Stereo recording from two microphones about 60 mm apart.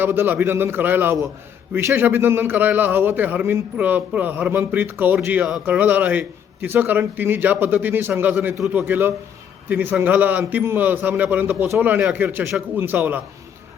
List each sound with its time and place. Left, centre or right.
0.0 s a man's voice: right
1.8 s speech: right
2.0 s a man's voice: right